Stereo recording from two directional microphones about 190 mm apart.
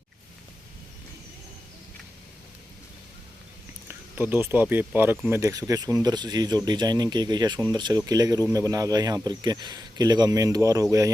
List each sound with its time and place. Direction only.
3.8 s speech: 10° right (ahead or behind)